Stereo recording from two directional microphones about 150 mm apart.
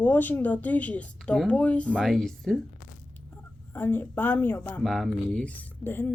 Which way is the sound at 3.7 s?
10° left (ahead or behind).